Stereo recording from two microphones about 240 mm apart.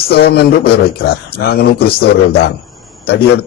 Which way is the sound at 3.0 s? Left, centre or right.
Left.